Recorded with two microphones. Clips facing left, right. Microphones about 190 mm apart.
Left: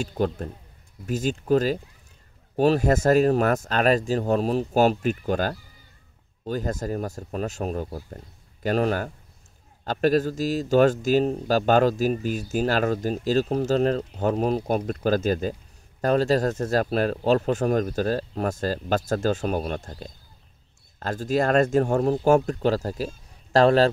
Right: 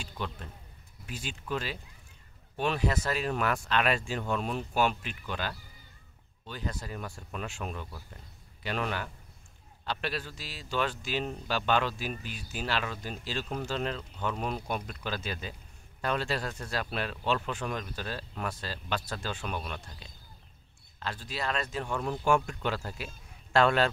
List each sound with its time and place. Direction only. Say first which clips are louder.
0.0 s speech: left 13 dB; 45° left (ahead or behind)